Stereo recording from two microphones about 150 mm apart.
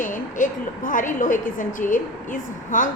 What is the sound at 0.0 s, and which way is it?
A woman's voice, 60° left (ahead or behind).